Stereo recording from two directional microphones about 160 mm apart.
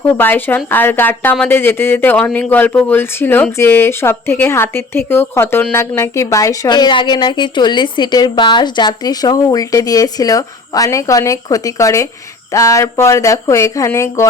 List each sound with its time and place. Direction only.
0.0 s a woman's voice: 10° left (ahead or behind)